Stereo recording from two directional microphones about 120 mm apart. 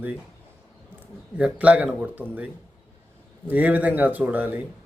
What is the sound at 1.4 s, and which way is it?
Speech, 10° right (ahead or behind).